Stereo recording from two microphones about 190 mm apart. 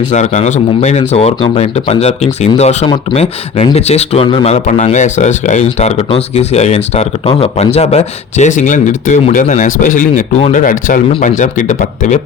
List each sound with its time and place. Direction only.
0.1 s a man's voice: 40° left (ahead or behind)